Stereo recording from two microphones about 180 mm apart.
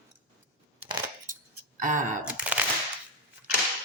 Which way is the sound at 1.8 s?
45° right (ahead or behind).